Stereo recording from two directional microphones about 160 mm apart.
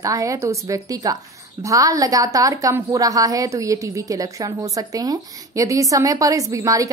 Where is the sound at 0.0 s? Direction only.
20° right (ahead or behind).